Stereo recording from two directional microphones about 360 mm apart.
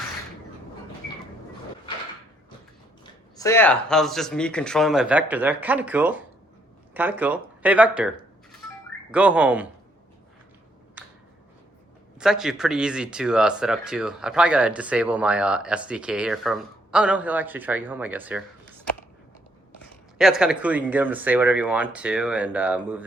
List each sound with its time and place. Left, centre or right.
3.0 s speech: centre
9.1 s speech: centre
12.2 s speech: centre
20.1 s speech: centre